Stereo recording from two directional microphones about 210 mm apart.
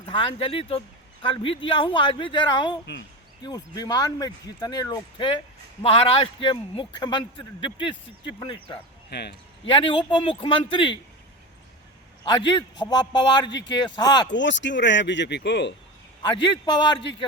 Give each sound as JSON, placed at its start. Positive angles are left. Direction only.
{"t": 0.0, "sound": "a man's voice", "side_deg": 25}
{"t": 9.0, "sound": "speech", "side_deg": 50}
{"t": 9.6, "sound": "a man's voice", "side_deg": 25}
{"t": 12.2, "sound": "a man's voice", "side_deg": 25}
{"t": 14.3, "sound": "speech", "side_deg": 60}
{"t": 16.4, "sound": "a man's voice", "side_deg": 25}